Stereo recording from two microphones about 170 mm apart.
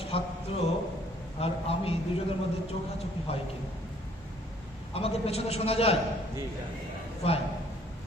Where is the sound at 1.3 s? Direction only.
35° left (ahead or behind).